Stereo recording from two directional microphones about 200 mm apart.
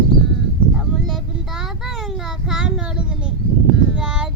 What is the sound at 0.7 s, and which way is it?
Child singing, centre (ahead or behind).